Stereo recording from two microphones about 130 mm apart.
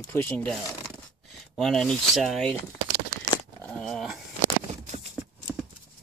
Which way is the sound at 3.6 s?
5° left (ahead or behind).